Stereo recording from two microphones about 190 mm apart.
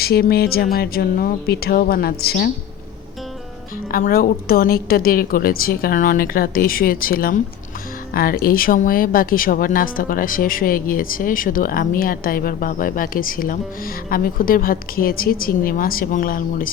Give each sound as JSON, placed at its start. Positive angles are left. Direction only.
{"t": 0.0, "sound": "speech", "side_deg": 55}
{"t": 3.9, "sound": "speech", "side_deg": 50}